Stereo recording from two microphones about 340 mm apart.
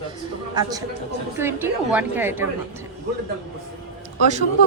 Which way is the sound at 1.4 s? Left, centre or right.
Centre.